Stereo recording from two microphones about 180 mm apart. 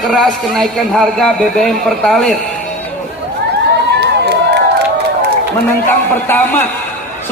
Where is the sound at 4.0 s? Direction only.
70° right (ahead or behind).